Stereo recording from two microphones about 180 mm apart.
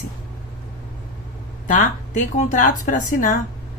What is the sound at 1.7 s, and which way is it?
A woman's voice, 45° left (ahead or behind).